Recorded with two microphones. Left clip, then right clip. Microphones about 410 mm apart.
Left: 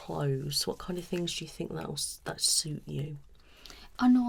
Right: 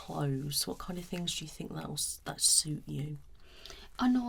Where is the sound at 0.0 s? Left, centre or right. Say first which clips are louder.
Left 3 dB; left.